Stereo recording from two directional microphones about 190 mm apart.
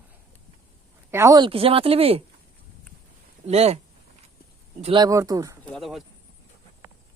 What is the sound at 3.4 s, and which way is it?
Speech, 35° right (ahead or behind).